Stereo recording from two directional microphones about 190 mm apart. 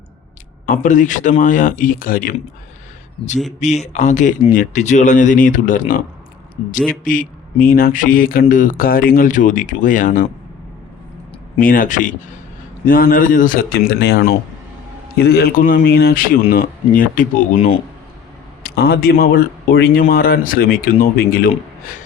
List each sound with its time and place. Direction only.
0.6 s speech: 45° left (ahead or behind)
3.6 s speech: 35° left (ahead or behind)
6.7 s speech: centre (ahead or behind)
7.0 s speech: 45° left (ahead or behind)
11.6 s speech: 45° left (ahead or behind)
18.6 s speech: 55° left (ahead or behind)